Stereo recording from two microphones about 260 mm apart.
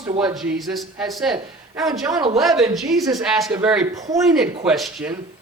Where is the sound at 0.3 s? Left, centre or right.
Centre.